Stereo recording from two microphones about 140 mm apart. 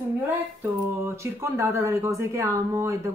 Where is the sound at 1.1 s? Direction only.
20° right (ahead or behind).